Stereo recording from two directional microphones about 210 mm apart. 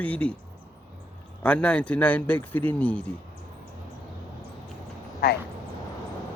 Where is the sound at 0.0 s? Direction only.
5° left (ahead or behind).